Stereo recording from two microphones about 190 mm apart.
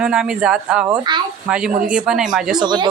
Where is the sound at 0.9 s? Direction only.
25° right (ahead or behind).